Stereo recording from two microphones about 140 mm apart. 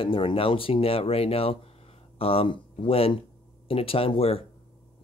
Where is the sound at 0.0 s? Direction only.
40° left (ahead or behind).